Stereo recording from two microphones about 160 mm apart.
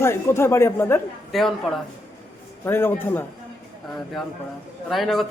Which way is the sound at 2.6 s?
15° left (ahead or behind).